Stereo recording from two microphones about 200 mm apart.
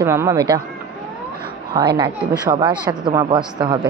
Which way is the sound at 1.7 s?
20° right (ahead or behind).